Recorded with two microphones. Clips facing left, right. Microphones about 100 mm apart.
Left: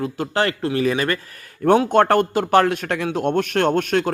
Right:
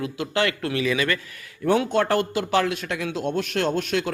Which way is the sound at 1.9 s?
55° left (ahead or behind).